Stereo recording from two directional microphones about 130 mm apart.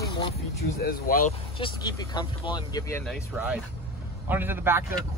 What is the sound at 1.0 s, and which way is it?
Speech, 90° left.